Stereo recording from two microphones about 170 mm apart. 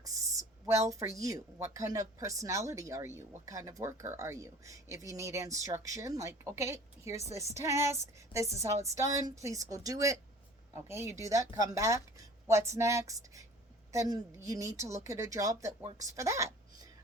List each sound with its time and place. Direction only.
0.0 s speech: 20° right (ahead or behind)
15.8 s speech: 35° right (ahead or behind)
16.0 s speech: 20° right (ahead or behind)